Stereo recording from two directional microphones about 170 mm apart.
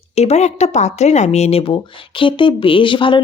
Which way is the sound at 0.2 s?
40° left (ahead or behind).